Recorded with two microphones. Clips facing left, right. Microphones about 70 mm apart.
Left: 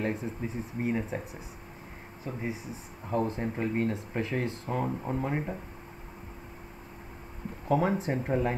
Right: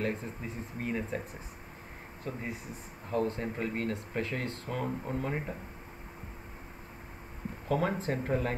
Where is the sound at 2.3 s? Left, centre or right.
Centre.